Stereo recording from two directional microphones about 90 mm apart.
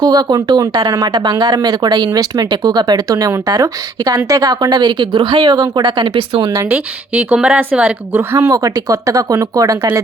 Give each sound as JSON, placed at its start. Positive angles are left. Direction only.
{"t": 0.0, "sound": "speech", "side_deg": -50}
{"t": 6.7, "sound": "speech", "side_deg": -20}
{"t": 8.4, "sound": "speech", "side_deg": -40}